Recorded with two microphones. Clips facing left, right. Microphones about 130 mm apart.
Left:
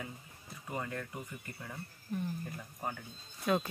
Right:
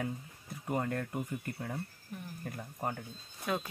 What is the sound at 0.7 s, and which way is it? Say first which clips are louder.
Speech: right 5 dB; 45° right (ahead or behind).